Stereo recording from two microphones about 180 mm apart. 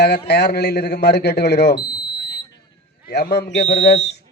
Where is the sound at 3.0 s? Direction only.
65° left (ahead or behind).